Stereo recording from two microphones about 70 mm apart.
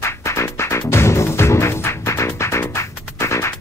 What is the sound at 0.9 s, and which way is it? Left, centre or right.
Music, left.